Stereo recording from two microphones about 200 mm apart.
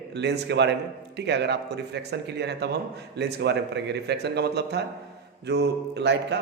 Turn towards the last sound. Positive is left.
turn(degrees=-60)  # may be behind; listen again after turning